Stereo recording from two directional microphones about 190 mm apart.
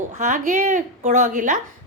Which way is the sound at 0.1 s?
40° right (ahead or behind).